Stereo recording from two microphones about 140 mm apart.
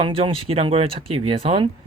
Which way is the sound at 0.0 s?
40° right (ahead or behind).